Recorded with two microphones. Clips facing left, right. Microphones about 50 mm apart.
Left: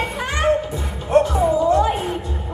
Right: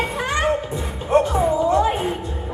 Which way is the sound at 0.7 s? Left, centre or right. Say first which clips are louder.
Left 1 dB; right.